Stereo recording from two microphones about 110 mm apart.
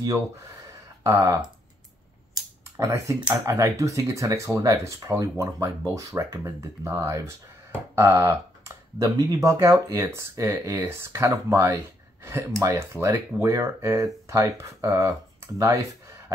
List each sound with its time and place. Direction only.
1.0 s speech: 25° right (ahead or behind)
2.8 s speech: 25° right (ahead or behind)